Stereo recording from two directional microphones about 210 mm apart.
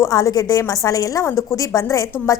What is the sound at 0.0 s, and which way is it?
A woman's voice, 15° left (ahead or behind).